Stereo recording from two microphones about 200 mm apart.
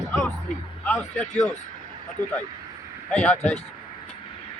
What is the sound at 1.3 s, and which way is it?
Speech, 35° left (ahead or behind).